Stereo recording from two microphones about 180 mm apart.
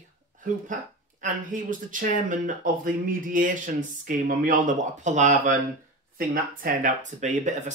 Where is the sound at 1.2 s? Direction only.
45° right (ahead or behind).